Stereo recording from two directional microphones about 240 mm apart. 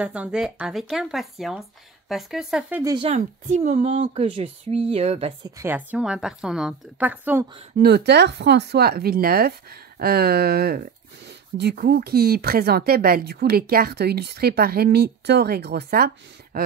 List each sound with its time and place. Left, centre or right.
0.0 s speech: centre
2.8 s speech: centre
3.9 s speech: right
5.6 s a woman's voice: centre
7.8 s speech: right